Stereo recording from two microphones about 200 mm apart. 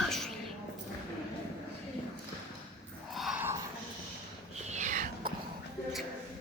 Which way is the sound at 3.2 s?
5° right (ahead or behind).